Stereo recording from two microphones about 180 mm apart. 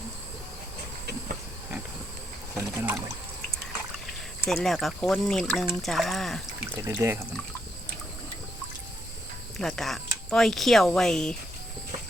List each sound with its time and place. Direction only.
2.6 s rowboat: 15° right (ahead or behind)
4.4 s speech: centre (ahead or behind)
6.7 s speech: 15° right (ahead or behind)
9.6 s speech: 5° left (ahead or behind)